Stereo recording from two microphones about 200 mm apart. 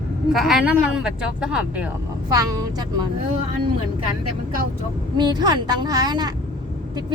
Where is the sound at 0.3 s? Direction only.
Centre (ahead or behind).